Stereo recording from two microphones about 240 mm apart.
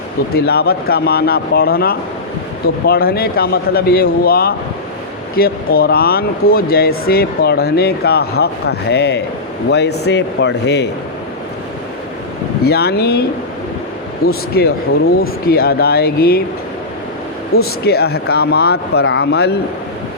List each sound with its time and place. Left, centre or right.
0.3 s speech: left
12.6 s speech: left
14.3 s speech: left
17.5 s speech: left